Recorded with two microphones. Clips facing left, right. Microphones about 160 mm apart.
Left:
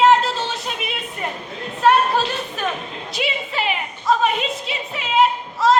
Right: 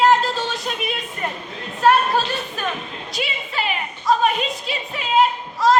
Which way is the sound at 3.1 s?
20° left (ahead or behind).